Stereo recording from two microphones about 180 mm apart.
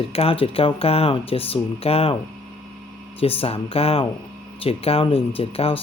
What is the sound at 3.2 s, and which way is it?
Speech, 30° left (ahead or behind).